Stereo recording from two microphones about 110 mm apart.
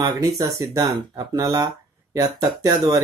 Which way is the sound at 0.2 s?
35° right (ahead or behind).